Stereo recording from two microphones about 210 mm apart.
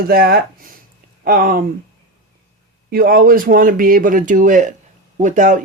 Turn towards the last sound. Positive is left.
turn(degrees=-40)  # may be behind; listen again after turning